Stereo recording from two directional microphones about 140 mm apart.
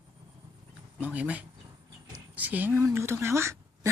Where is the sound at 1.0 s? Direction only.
10° right (ahead or behind).